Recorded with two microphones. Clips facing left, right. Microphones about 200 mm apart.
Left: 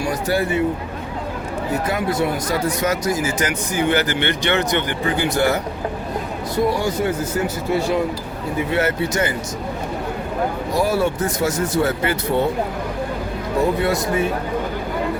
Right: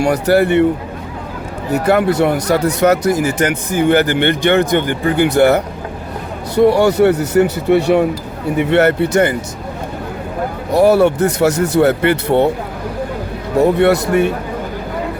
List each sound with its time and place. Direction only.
0.0 s speech: 70° right (ahead or behind)
1.7 s speech: 70° right (ahead or behind)
6.7 s speech: 70° right (ahead or behind)
10.7 s speech: 65° right (ahead or behind)
13.6 s speech: 70° right (ahead or behind)